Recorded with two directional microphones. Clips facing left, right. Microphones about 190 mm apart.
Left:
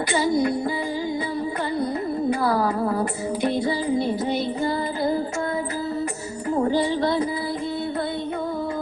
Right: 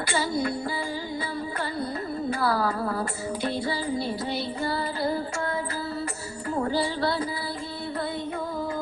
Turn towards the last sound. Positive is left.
turn(degrees=20)  # may be behind; listen again after turning